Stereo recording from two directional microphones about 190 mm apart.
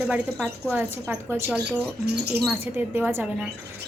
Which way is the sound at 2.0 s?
60° right (ahead or behind).